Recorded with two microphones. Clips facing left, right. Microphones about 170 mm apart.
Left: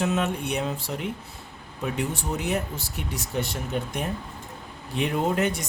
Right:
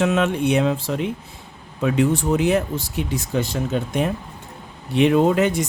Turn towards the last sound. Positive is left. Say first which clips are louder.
# right 7 dB
turn(degrees=-90)